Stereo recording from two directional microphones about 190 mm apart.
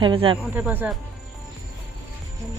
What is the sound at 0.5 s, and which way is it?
Speech, 10° right (ahead or behind).